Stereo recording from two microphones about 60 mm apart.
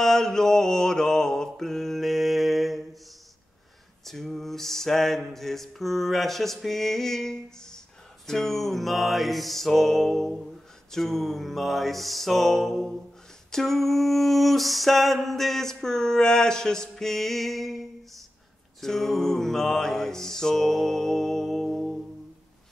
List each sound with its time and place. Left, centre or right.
0.0 s mantra: centre
4.0 s a sound: centre
18.8 s mantra: centre